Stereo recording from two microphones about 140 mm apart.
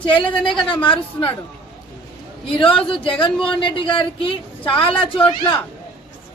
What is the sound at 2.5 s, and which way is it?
Speech, 40° left (ahead or behind).